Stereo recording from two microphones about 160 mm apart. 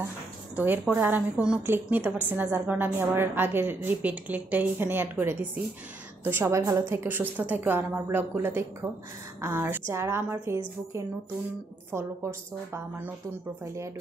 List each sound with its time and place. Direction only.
0.6 s a woman's voice: 10° right (ahead or behind)
11.9 s a woman's voice: 15° right (ahead or behind)